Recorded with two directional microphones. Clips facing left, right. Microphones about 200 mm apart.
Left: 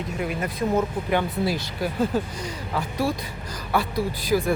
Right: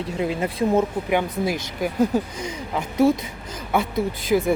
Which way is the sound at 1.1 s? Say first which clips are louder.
Right 1 dB; 15° right (ahead or behind).